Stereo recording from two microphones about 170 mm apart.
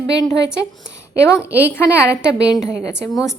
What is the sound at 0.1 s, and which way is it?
A woman's voice, 20° left (ahead or behind).